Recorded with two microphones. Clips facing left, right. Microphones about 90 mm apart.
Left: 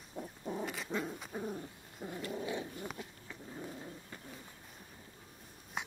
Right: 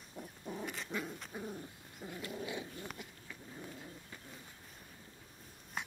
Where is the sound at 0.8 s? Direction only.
15° left (ahead or behind).